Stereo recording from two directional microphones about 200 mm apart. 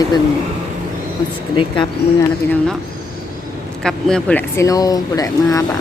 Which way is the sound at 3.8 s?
5° left (ahead or behind).